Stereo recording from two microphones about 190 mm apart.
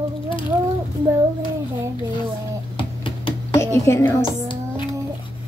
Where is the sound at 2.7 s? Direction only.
25° left (ahead or behind).